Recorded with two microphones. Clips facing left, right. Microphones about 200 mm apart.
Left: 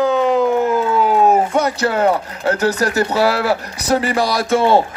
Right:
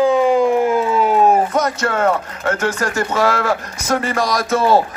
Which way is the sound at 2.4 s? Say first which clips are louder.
Left 3 dB; 35° left (ahead or behind).